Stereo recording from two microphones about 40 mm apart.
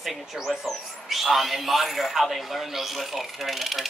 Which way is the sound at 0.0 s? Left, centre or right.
Centre.